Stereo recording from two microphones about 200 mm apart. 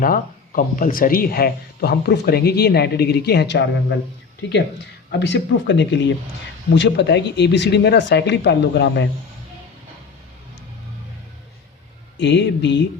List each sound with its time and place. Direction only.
0.0 s speech: 45° left (ahead or behind)
5.2 s speech: 65° left (ahead or behind)
12.2 s speech: 60° left (ahead or behind)